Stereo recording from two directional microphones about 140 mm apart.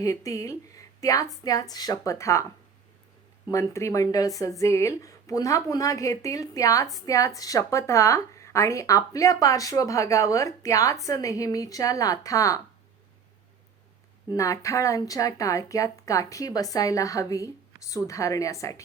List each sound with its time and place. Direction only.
0.0 s a woman's voice: 25° left (ahead or behind)
3.5 s a woman's voice: 20° left (ahead or behind)
14.3 s a woman's voice: 20° left (ahead or behind)